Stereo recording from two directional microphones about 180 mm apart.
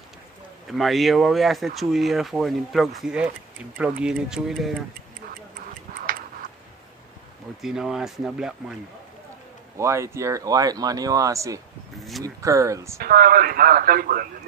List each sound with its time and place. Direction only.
0.7 s speech: centre (ahead or behind)
7.6 s speech: centre (ahead or behind)
9.8 s speech: 15° right (ahead or behind)
13.0 s a man's voice: 55° right (ahead or behind)